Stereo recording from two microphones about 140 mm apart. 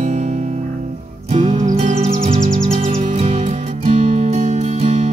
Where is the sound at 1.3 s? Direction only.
60° right (ahead or behind).